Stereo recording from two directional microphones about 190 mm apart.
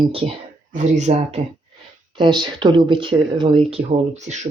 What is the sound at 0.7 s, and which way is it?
Speech, 40° right (ahead or behind).